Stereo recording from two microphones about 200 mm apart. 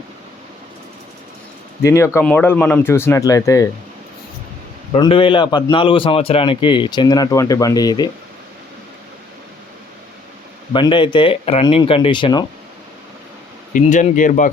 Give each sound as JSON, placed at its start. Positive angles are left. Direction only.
{"t": 1.8, "sound": "speech", "side_deg": 15}
{"t": 4.9, "sound": "a man's voice", "side_deg": 25}
{"t": 10.7, "sound": "a man's voice", "side_deg": 25}
{"t": 13.7, "sound": "speech", "side_deg": 40}